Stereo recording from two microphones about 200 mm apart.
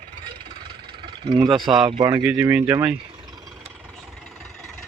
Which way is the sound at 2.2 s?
5° right (ahead or behind).